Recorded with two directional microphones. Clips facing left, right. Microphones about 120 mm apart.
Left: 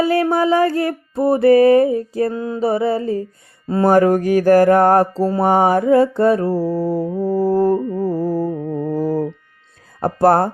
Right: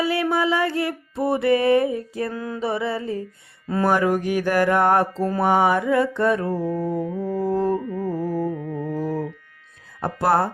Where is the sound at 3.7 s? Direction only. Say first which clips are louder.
Left 5 dB; 30° left (ahead or behind).